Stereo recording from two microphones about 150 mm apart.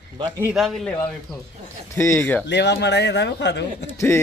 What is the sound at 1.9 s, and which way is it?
Speech, 20° left (ahead or behind).